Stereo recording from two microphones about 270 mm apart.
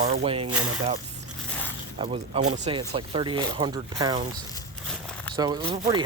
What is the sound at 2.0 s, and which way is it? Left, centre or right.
Speech, right.